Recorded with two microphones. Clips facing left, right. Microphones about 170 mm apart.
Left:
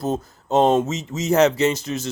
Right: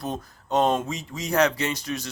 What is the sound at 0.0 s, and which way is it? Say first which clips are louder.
Speech: left 7 dB; 25° left (ahead or behind).